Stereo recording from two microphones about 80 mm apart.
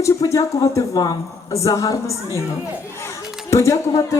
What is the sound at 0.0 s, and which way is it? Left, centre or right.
Speech, left.